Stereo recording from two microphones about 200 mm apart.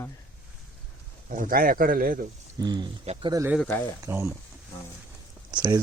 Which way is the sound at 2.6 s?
20° right (ahead or behind).